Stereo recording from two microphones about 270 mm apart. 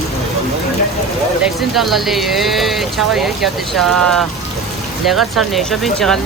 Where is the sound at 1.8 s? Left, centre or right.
Centre.